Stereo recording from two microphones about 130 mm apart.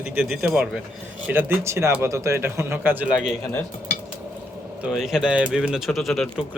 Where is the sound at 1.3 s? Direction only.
15° right (ahead or behind).